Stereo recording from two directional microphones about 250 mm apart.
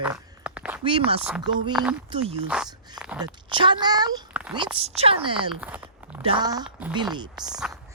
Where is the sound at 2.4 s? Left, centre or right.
Centre.